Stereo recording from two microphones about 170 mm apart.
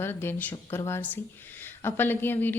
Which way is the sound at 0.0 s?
15° left (ahead or behind).